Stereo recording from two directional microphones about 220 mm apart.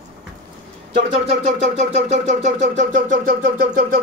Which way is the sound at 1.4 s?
30° right (ahead or behind).